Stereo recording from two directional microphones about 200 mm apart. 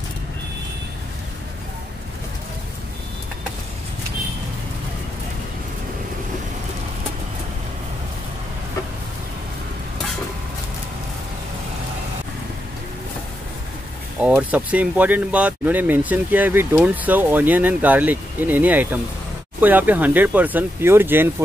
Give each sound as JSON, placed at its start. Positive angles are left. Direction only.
{"t": 14.2, "sound": "speech", "side_deg": -5}